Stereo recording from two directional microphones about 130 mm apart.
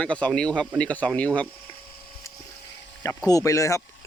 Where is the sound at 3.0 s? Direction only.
25° left (ahead or behind).